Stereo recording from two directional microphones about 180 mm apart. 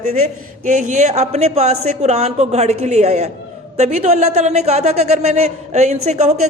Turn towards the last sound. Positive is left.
turn(degrees=-40)  # may be behind; listen again after turning